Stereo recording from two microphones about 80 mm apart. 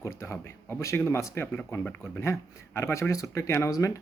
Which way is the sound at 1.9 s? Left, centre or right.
Centre.